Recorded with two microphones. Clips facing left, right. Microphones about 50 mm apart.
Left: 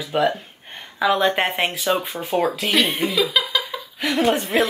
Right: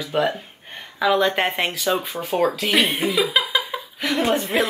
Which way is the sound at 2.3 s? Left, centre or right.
Centre.